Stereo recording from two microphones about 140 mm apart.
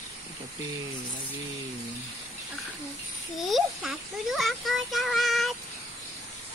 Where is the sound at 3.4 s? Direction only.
Centre (ahead or behind).